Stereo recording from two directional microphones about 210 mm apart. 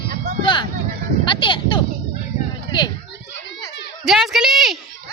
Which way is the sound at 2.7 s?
20° left (ahead or behind).